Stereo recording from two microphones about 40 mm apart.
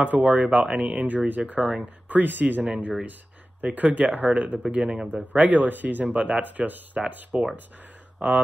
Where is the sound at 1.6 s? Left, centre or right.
Centre.